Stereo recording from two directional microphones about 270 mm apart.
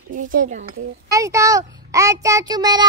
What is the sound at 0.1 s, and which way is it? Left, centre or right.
Speech, right.